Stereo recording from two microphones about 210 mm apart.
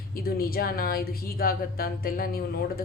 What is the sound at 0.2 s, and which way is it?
Speech, 45° left (ahead or behind).